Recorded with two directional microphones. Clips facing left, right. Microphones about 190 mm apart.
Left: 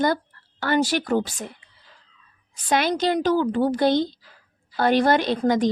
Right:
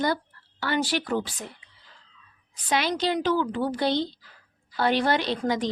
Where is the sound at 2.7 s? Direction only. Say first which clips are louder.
Left 4 dB; 50° left (ahead or behind).